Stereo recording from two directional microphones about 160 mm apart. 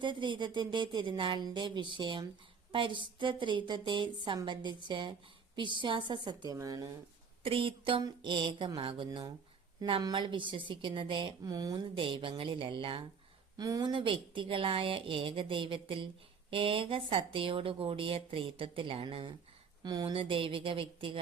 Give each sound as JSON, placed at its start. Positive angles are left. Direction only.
{"t": 0.0, "sound": "a woman's voice", "side_deg": -30}
{"t": 7.4, "sound": "a woman's voice", "side_deg": -35}